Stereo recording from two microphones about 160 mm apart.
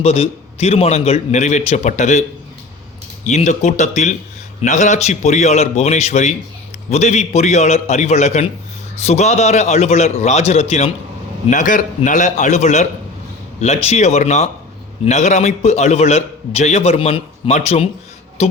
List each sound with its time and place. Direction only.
0.0 s a man's voice: 40° left (ahead or behind)
3.2 s a man's voice: 50° left (ahead or behind)
11.4 s a man's voice: 55° left (ahead or behind)